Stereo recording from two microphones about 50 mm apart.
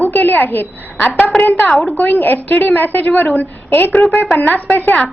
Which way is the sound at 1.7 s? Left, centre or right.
Centre.